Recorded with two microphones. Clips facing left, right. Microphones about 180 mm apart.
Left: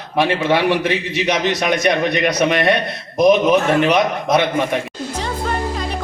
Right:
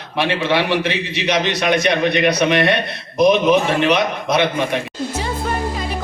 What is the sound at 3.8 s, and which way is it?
Speech, 45° left (ahead or behind).